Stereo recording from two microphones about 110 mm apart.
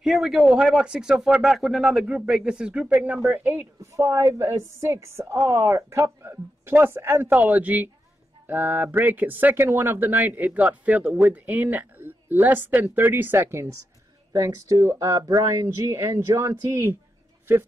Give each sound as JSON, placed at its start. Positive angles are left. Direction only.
{"t": 0.0, "sound": "a woman's voice", "side_deg": 0}